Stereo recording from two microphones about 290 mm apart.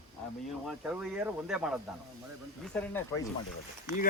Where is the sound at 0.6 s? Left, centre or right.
Centre.